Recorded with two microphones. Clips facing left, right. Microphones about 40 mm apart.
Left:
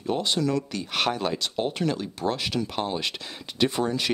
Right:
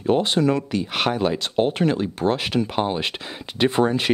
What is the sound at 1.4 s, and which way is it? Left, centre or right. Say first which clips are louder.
Speech: right 7 dB; right.